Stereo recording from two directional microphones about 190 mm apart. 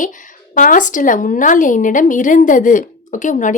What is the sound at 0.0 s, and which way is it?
A woman's voice, 40° left (ahead or behind).